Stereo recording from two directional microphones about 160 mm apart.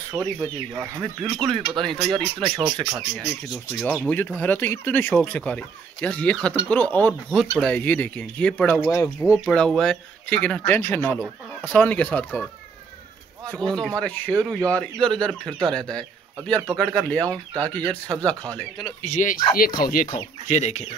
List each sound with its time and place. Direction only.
0.1 s speech: 5° right (ahead or behind)
0.7 s speech: 20° right (ahead or behind)
1.8 s speech: 5° left (ahead or behind)
3.8 s speech: 10° left (ahead or behind)
9.5 s speech: 5° left (ahead or behind)
13.5 s speech: 5° left (ahead or behind)
15.0 s speech: 30° right (ahead or behind)
15.7 s speech: 5° left (ahead or behind)
19.0 s speech: 55° left (ahead or behind)
20.4 s speech: 45° left (ahead or behind)